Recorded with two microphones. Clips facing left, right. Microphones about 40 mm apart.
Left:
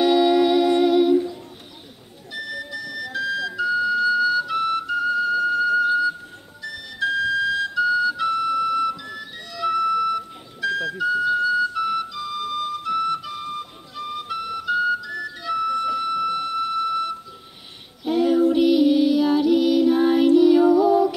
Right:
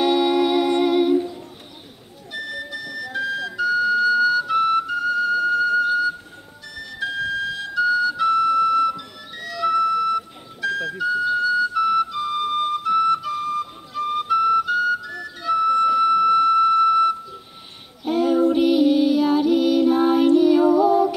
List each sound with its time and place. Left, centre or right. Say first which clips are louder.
0.0 s music: left 1 dB; centre
2.3 s music: right 1 dB; centre
3.5 s flute: right 3 dB; centre
7.8 s flute: right 3 dB; centre
11.7 s music: right 5 dB; centre
12.1 s flute: right 5 dB; right
12.8 s flute: right 5 dB; centre
13.3 s music: right 6 dB; right
14.2 s flute: right 11 dB; centre
15.0 s music: right 3 dB; centre